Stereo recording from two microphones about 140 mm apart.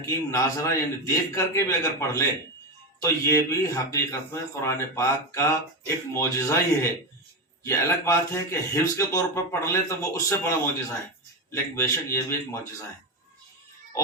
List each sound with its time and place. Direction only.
0.0 s a man's voice: 25° left (ahead or behind)